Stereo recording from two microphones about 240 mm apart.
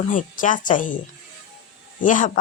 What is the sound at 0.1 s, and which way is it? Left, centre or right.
Speech, left.